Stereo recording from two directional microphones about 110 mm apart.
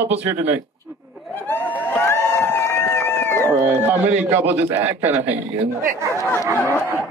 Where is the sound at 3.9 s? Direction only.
85° right.